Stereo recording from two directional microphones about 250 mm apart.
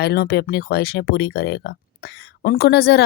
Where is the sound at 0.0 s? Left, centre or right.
Left.